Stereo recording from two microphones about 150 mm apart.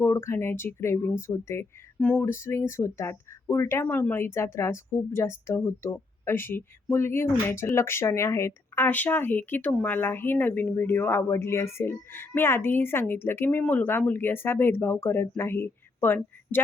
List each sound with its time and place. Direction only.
0.0 s speech: 15° left (ahead or behind)